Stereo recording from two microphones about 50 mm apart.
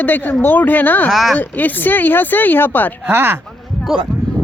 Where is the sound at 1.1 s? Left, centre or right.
Centre.